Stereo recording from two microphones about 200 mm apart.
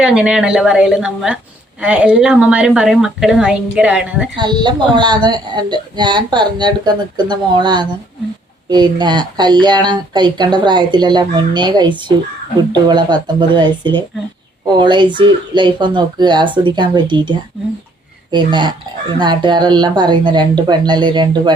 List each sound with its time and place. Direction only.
0.0 s a woman's voice: 5° right (ahead or behind)
4.4 s a woman's voice: 20° right (ahead or behind)